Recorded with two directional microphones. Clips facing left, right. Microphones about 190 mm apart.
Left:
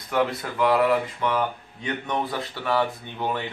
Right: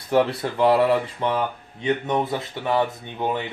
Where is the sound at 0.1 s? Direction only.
30° right (ahead or behind).